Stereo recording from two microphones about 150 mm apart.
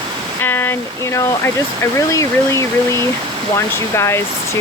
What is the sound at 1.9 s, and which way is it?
Speech, 20° left (ahead or behind).